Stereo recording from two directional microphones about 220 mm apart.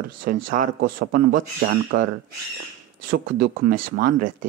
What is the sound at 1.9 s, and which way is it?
Speech, 55° right (ahead or behind).